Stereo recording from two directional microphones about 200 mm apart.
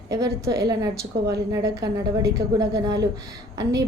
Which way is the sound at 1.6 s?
15° right (ahead or behind).